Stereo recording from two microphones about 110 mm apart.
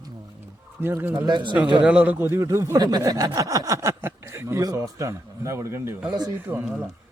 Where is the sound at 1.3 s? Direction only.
45° right (ahead or behind).